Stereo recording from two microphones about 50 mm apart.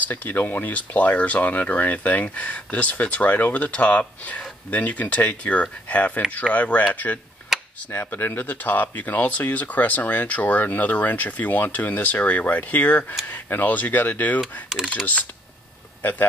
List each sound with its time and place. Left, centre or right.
0.0 s speech: left
7.5 s a sound: centre
8.1 s speech: left
14.4 s mechanisms: centre
16.0 s speech: left